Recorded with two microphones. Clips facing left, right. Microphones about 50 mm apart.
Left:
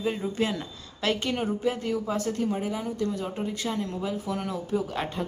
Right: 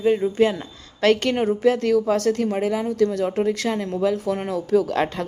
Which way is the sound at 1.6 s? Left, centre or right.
Right.